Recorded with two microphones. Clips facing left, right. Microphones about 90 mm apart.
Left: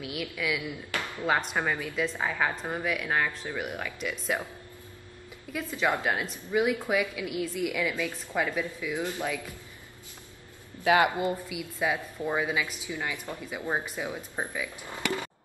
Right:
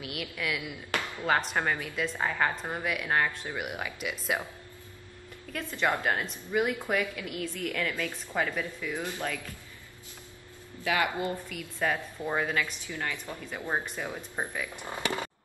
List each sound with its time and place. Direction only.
0.0 s a woman's voice: centre (ahead or behind)
5.5 s a woman's voice: 5° left (ahead or behind)
10.8 s speech: 20° left (ahead or behind)
11.4 s a woman's voice: 10° left (ahead or behind)